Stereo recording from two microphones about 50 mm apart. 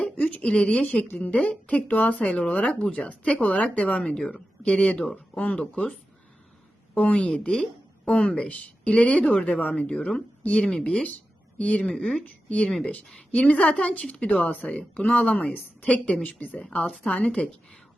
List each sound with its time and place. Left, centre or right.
0.0 s a sound: left
0.9 s a woman's voice: left
2.1 s speech: left
4.2 s speech: centre
4.6 s speech: left
5.0 s speech: centre
5.5 s a woman's voice: left
9.9 s speech: centre
10.4 s speech: left
12.2 s speech: left